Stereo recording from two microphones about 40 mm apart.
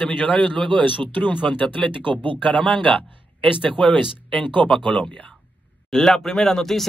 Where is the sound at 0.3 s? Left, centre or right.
Left.